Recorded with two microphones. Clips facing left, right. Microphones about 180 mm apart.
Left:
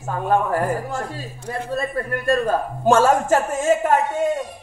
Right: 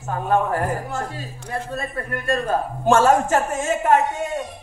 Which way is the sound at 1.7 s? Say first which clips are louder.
Left 4 dB; 45° left (ahead or behind).